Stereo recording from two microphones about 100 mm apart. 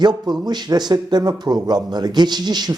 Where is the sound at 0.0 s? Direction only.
45° right (ahead or behind).